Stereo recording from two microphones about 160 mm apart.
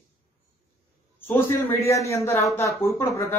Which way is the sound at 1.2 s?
15° left (ahead or behind).